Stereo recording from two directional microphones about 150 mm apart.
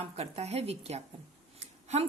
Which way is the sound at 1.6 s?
45° right (ahead or behind).